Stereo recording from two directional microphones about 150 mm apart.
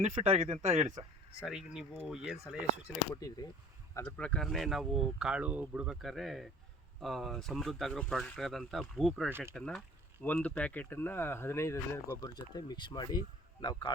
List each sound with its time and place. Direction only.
0.0 s speech: 50° right (ahead or behind)
1.4 s speech: 5° right (ahead or behind)
3.2 s speech: 25° left (ahead or behind)
3.9 s speech: 10° left (ahead or behind); by 13.9 s 30° left (ahead or behind)